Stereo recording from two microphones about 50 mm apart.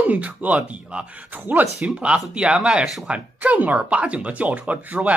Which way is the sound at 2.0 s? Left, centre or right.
Right.